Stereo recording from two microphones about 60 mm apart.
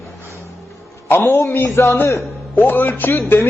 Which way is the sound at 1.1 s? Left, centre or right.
Left.